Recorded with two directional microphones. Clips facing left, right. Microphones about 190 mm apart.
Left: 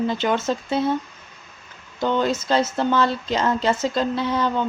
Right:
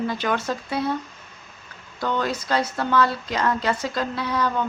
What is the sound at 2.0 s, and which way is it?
Speech, 25° left (ahead or behind).